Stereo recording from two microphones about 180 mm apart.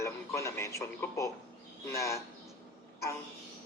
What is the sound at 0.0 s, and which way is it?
A man's voice, 15° left (ahead or behind).